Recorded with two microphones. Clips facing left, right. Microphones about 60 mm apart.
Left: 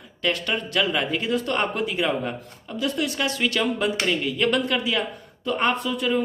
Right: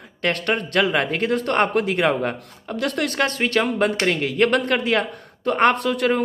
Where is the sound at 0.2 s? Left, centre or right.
Right.